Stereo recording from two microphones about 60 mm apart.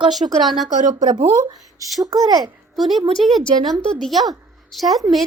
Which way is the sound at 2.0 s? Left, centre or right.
Right.